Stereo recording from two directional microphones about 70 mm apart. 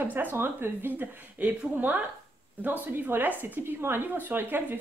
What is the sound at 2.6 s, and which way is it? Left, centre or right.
Speech, right.